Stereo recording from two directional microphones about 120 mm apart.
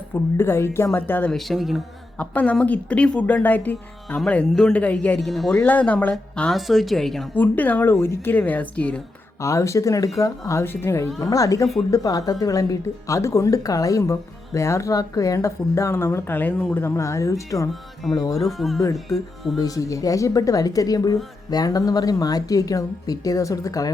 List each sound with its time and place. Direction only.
0.1 s speech: 20° left (ahead or behind)
1.3 s a woman's voice: centre (ahead or behind)
2.1 s a woman's voice: 10° left (ahead or behind)
5.5 s a woman's voice: 10° left (ahead or behind)
7.3 s speech: 15° left (ahead or behind)
9.4 s speech: 25° left (ahead or behind)
18.4 s a woman's voice: centre (ahead or behind)
19.5 s speech: 30° left (ahead or behind)